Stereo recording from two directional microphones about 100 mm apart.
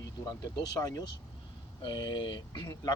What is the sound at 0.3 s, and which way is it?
Speech, 40° left (ahead or behind).